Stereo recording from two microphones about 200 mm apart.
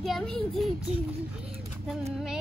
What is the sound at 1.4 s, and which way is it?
Vehicle, 5° right (ahead or behind).